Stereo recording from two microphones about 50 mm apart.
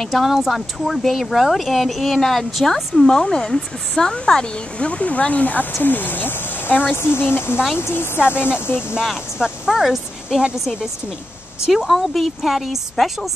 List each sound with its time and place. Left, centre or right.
0.0 s speech: centre
4.8 s speech: left
7.0 s speech: left
9.4 s speech: centre
11.6 s speech: centre